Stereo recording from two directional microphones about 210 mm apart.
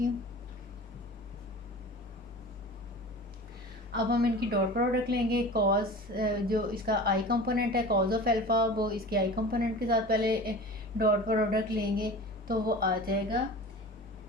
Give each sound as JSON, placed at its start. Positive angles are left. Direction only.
{"t": 3.9, "sound": "a woman's voice", "side_deg": -50}